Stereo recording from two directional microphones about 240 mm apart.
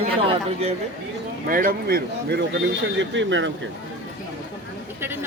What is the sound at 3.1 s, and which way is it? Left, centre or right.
Speech, right.